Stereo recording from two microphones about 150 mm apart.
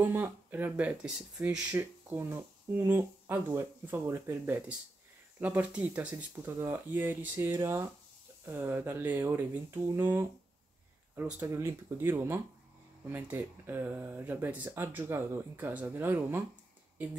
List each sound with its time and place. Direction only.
0.0 s speech: 15° right (ahead or behind)